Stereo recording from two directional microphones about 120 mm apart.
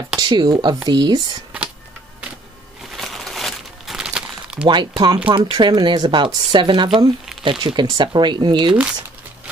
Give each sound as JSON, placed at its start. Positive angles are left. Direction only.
{"t": 0.2, "sound": "speech", "side_deg": -40}
{"t": 3.0, "sound": "crumpling", "side_deg": 0}
{"t": 4.6, "sound": "speech", "side_deg": -40}